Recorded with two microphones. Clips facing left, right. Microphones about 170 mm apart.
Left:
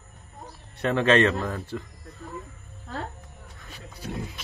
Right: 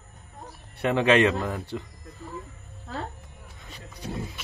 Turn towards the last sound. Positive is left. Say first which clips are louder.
# even
turn(degrees=0)  # may be behind; listen again after turning